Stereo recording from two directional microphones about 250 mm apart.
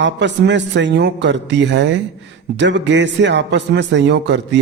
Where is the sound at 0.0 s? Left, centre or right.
Right.